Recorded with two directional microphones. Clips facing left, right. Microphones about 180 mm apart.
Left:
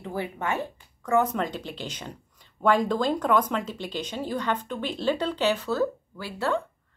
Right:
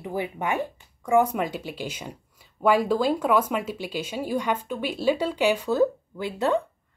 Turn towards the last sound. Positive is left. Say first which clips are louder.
# right 4 dB
turn(degrees=-20)  # may be behind; listen again after turning